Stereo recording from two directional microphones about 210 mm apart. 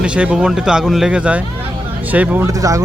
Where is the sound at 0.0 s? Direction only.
5° right (ahead or behind).